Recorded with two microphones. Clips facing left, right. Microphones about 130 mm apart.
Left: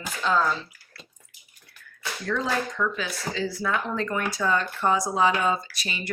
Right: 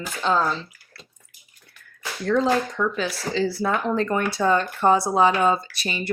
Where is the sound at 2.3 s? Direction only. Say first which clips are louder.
Right 7 dB; 35° right (ahead or behind).